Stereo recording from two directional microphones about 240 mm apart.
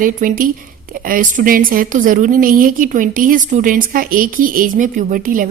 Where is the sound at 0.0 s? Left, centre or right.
Right.